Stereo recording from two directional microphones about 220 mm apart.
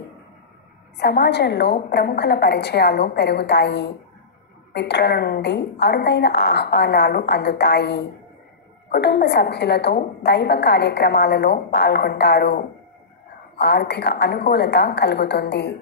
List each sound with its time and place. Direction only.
0.9 s a woman's voice: 50° left (ahead or behind)